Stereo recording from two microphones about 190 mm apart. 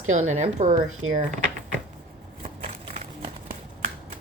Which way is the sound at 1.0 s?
90° right.